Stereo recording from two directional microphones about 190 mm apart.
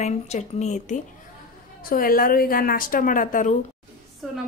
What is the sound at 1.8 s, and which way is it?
Speech, 50° left (ahead or behind).